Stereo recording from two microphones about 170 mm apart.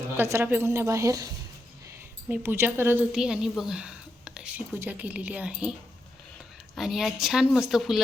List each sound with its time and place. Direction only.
0.2 s speech: 15° right (ahead or behind)
2.3 s a woman's voice: 10° right (ahead or behind)
6.7 s a woman's voice: centre (ahead or behind)